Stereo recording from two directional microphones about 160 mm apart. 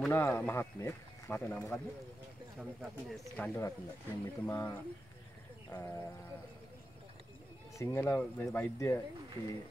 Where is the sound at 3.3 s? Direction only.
10° left (ahead or behind).